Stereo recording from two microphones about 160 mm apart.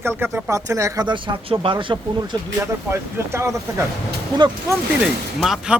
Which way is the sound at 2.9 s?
15° right (ahead or behind).